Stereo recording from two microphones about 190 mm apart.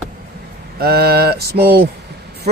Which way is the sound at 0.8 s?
55° right (ahead or behind).